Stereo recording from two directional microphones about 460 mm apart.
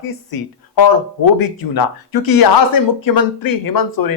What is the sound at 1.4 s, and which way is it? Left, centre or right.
Speech, left.